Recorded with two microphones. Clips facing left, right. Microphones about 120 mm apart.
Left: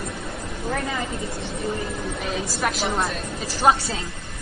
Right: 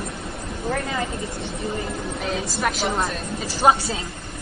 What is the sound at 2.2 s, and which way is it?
Speech, centre (ahead or behind).